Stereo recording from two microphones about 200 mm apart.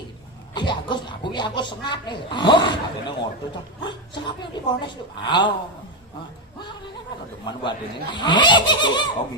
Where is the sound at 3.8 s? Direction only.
20° left (ahead or behind).